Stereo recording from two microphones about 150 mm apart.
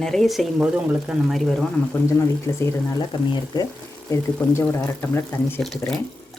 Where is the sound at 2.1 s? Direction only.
20° left (ahead or behind).